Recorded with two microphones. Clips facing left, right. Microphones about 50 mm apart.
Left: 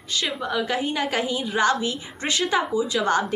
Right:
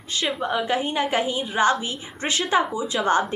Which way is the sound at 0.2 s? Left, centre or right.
Right.